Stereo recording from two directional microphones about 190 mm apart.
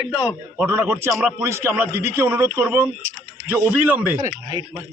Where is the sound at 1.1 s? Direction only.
Centre (ahead or behind).